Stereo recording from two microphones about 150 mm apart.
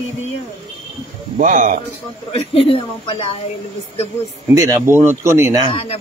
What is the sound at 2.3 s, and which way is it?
Speech, 40° left (ahead or behind).